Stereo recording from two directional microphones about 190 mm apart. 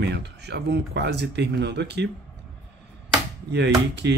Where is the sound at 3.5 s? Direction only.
65° right (ahead or behind).